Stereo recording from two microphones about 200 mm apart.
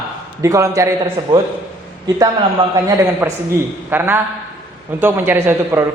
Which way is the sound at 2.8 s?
15° right (ahead or behind).